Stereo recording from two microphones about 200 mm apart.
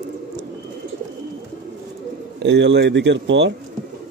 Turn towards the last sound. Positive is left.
turn(degrees=-65)  # may be behind; listen again after turning